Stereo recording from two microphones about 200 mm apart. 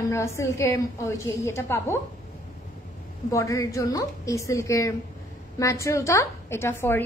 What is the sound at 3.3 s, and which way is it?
A woman's voice, 15° left (ahead or behind).